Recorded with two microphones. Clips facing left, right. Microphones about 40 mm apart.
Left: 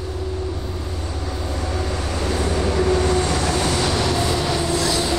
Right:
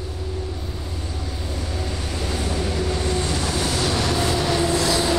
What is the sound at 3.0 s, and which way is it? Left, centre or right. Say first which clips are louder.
Vehicle: left 4 dB; left.